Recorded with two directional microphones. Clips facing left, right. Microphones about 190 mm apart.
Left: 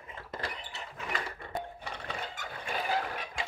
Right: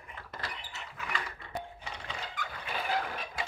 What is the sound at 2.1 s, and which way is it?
Dog, 45° left (ahead or behind).